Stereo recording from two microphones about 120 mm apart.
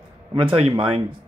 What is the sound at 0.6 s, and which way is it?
Speech, 50° right (ahead or behind).